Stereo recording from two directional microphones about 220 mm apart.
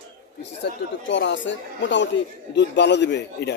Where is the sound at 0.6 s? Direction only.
55° left (ahead or behind).